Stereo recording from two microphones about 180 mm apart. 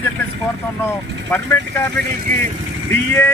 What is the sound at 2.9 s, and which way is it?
Speech, 10° left (ahead or behind).